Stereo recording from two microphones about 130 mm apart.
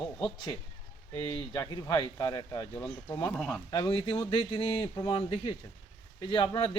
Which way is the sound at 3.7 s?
40° left (ahead or behind).